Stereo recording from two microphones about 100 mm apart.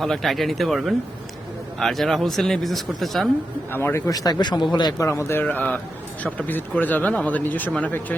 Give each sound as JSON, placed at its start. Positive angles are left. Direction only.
{"t": 0.0, "sound": "speech", "side_deg": 0}
{"t": 3.7, "sound": "speech", "side_deg": 20}
{"t": 4.9, "sound": "speech", "side_deg": 30}